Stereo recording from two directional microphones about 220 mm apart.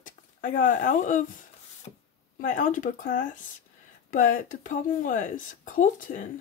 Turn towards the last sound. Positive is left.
turn(degrees=35)  # may be behind; listen again after turning